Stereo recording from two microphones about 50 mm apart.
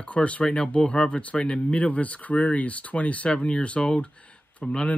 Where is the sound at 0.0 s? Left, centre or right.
Left.